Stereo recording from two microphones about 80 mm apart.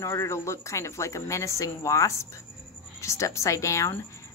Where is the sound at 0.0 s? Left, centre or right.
Left.